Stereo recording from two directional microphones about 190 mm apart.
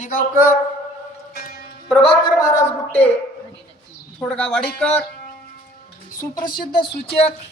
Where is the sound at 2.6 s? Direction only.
10° left (ahead or behind).